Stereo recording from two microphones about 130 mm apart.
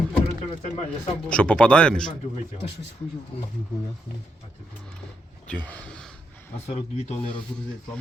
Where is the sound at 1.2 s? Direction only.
10° left (ahead or behind).